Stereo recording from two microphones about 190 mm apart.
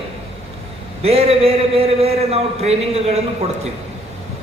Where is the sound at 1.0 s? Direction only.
30° right (ahead or behind).